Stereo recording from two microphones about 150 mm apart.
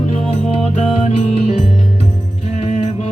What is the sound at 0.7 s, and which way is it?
Music, 50° left (ahead or behind).